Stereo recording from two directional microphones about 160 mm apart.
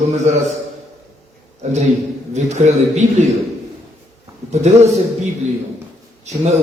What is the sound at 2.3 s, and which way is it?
Speech, 45° right (ahead or behind).